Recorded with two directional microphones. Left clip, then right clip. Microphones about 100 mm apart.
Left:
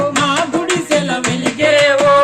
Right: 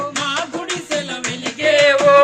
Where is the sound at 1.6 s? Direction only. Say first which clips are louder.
Left 2 dB; 30° right (ahead or behind).